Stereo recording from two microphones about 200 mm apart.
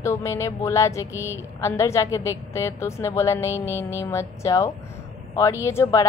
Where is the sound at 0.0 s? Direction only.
15° left (ahead or behind).